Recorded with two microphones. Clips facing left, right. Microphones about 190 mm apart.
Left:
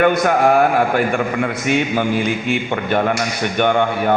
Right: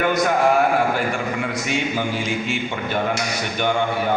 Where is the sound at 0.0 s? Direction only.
60° left (ahead or behind).